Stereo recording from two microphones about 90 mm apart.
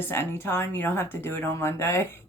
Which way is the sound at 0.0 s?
25° left (ahead or behind).